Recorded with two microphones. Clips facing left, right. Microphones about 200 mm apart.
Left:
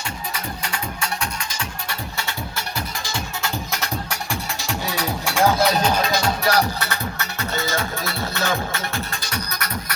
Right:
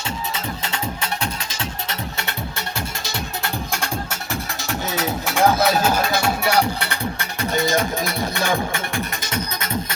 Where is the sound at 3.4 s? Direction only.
55° right (ahead or behind).